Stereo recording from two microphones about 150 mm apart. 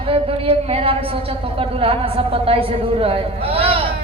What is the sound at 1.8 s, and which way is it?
A woman's voice, 40° right (ahead or behind).